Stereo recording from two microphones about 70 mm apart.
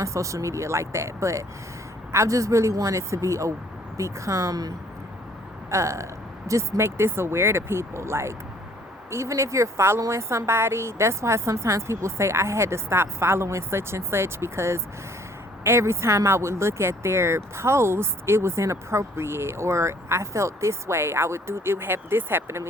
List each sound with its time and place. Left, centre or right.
0.0 s speech: right
5.7 s speech: right